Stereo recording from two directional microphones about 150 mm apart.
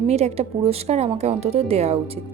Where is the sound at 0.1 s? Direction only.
45° right (ahead or behind).